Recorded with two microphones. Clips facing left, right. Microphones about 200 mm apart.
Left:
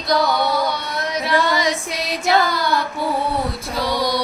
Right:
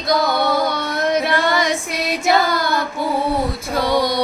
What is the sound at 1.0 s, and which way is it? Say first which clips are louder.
Music: right 2 dB; 55° right (ahead or behind).